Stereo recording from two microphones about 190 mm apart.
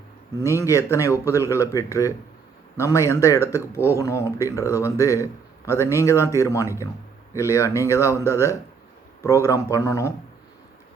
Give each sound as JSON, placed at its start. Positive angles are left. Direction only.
{"t": 0.5, "sound": "a man's voice", "side_deg": 15}